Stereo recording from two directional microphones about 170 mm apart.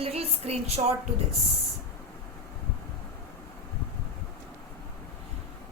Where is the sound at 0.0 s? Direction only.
35° right (ahead or behind).